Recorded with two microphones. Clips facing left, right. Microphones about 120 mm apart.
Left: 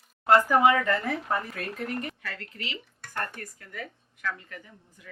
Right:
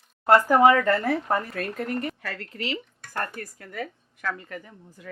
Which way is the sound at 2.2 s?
45° right (ahead or behind).